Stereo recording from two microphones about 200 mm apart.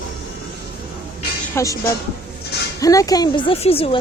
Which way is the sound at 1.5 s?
15° left (ahead or behind).